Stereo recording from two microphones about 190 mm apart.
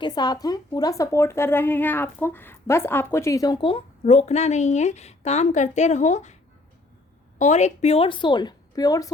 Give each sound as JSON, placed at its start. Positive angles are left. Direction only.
{"t": 0.0, "sound": "speech", "side_deg": 20}
{"t": 7.3, "sound": "speech", "side_deg": 40}